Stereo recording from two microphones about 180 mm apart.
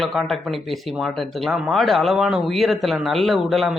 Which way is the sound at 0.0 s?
Centre (ahead or behind).